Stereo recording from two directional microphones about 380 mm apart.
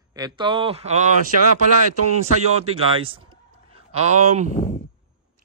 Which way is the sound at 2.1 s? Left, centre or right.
Centre.